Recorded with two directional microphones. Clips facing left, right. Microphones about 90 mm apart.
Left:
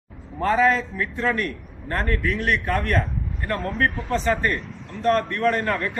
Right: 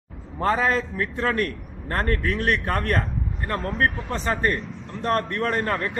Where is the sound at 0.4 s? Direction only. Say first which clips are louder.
Left 2 dB; 35° right (ahead or behind).